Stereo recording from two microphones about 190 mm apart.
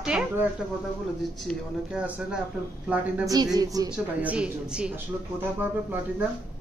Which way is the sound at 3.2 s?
20° right (ahead or behind).